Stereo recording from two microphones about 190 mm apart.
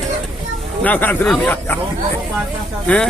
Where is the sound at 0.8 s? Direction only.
10° left (ahead or behind).